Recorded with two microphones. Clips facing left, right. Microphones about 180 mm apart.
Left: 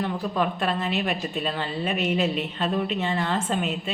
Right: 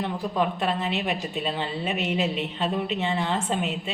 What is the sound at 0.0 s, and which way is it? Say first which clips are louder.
A woman's voice: even; 20° right (ahead or behind).